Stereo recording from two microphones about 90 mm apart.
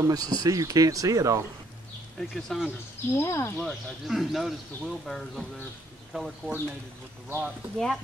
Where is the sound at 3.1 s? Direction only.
30° left (ahead or behind).